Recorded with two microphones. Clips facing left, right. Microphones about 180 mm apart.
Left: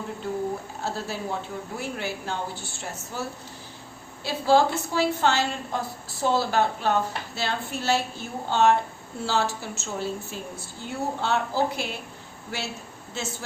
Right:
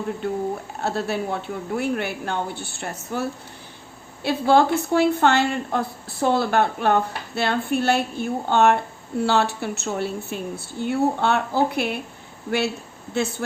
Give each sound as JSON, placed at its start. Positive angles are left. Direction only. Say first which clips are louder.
{"t": 0.8, "sound": "a woman's voice", "louder": "right 6 dB", "side_deg": -65}